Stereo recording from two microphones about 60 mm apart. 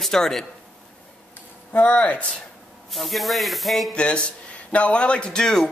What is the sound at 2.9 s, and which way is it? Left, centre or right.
Speech, centre.